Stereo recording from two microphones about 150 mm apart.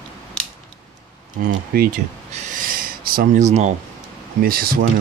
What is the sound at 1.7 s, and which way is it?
Speech, 85° right.